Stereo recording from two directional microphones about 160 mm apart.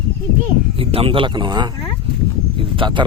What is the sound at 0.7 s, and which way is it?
Speech, 35° right (ahead or behind).